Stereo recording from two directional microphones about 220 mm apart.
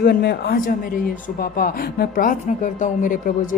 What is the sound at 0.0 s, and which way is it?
A woman's voice, 45° left (ahead or behind).